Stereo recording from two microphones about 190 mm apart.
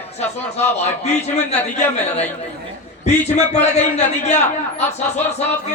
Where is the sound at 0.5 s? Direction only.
35° left (ahead or behind).